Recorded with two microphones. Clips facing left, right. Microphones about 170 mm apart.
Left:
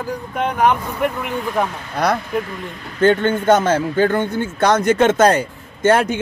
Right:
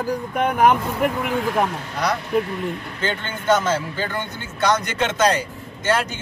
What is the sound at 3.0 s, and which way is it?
Speech, 50° left (ahead or behind).